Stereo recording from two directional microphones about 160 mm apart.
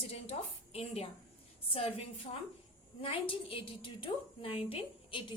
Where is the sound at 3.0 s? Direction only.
35° left (ahead or behind).